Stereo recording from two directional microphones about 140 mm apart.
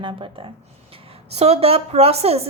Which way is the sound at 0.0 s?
35° right (ahead or behind).